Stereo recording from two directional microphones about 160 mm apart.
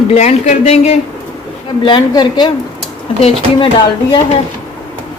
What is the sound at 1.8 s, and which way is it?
Speech, 30° left (ahead or behind).